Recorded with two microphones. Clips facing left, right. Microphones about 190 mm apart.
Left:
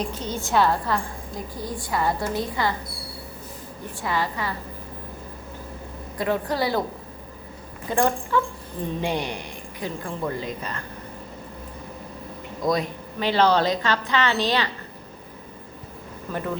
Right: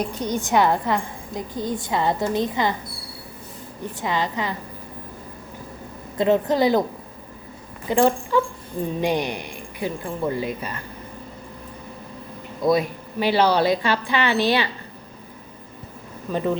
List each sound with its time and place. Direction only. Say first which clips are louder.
0.0 s a woman's voice: right 4 dB; 15° right (ahead or behind)
4.0 s a woman's voice: right 2 dB; 20° right (ahead or behind)
6.1 s a woman's voice: right 6 dB; 20° right (ahead or behind)
7.9 s a woman's voice: right 4 dB; 15° right (ahead or behind)
12.6 s a woman's voice: right 4 dB; 5° right (ahead or behind)
16.3 s a woman's voice: right 5 dB; 15° right (ahead or behind)